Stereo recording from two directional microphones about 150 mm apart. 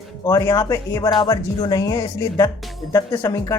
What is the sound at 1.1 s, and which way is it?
Speech, 30° left (ahead or behind).